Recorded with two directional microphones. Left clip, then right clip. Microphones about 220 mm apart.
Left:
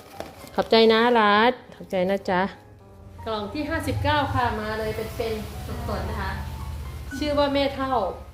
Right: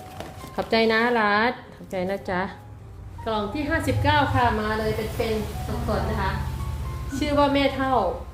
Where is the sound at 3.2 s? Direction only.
10° left (ahead or behind).